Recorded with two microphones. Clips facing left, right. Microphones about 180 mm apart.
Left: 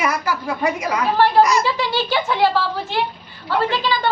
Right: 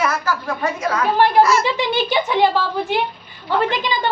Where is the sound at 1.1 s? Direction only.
15° right (ahead or behind).